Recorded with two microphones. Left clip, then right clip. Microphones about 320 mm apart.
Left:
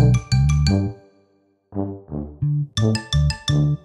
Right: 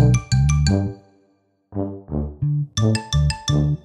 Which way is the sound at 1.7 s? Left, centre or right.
Centre.